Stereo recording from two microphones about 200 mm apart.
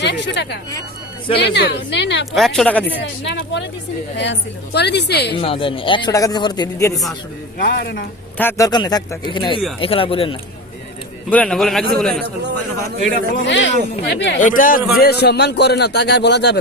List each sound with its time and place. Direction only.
0.0 s a man's voice: 60° left (ahead or behind)
2.3 s a man's voice: centre (ahead or behind)
3.0 s a man's voice: 65° left (ahead or behind)
5.3 s a man's voice: 25° left (ahead or behind)
7.6 s speech: 50° left (ahead or behind)
8.4 s a man's voice: 15° left (ahead or behind)
11.3 s a man's voice: 5° left (ahead or behind)
12.2 s a man's voice: 60° right (ahead or behind)
13.4 s a man's voice: 65° left (ahead or behind)
13.9 s speech: 55° left (ahead or behind)
14.3 s a man's voice: 40° left (ahead or behind); by 16.6 s 60° left (ahead or behind)